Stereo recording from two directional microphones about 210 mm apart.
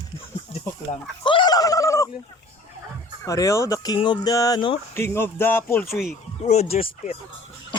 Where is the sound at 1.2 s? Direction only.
20° left (ahead or behind).